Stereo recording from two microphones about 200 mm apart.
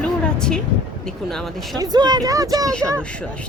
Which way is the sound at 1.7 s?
20° right (ahead or behind).